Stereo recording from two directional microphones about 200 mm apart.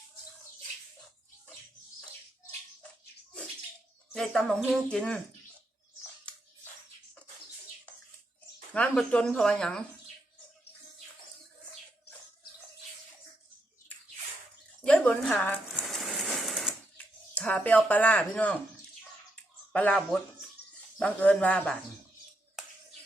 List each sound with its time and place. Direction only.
4.1 s speech: centre (ahead or behind)
8.7 s speech: 5° left (ahead or behind)
14.8 s a sound: 5° left (ahead or behind)
17.3 s speech: 10° left (ahead or behind)
19.7 s speech: 5° left (ahead or behind)
21.0 s speech: 5° left (ahead or behind)